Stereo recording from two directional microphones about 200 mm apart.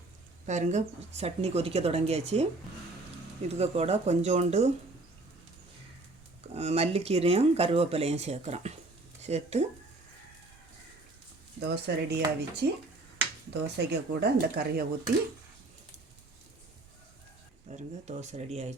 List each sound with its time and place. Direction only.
0.4 s speech: 35° right (ahead or behind)
3.5 s speech: 30° right (ahead or behind)
6.5 s speech: 30° right (ahead or behind)
11.6 s speech: 55° right (ahead or behind)
17.7 s speech: 35° right (ahead or behind)